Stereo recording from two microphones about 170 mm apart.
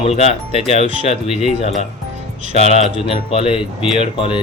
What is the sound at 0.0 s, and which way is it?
A man's voice, 40° left (ahead or behind).